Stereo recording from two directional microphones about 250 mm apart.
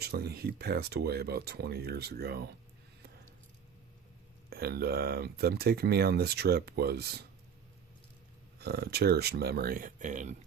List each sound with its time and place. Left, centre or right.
0.0 s speech: right
4.4 s speech: right
8.5 s speech: right